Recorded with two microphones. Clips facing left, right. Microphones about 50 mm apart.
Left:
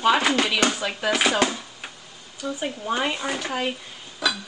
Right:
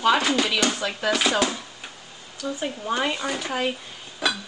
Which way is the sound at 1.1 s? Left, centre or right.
Left.